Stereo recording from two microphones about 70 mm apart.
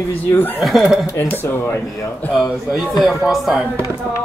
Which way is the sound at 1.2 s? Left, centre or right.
Left.